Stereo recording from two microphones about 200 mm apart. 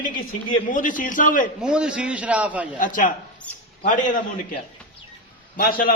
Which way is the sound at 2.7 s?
40° left (ahead or behind).